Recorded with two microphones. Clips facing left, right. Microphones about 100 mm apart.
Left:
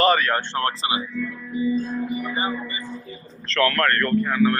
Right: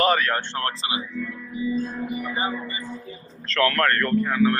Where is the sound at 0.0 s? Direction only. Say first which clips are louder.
Left 2 dB; 10° right (ahead or behind).